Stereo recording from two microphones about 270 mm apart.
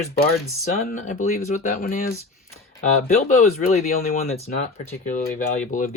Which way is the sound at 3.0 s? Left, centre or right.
Left.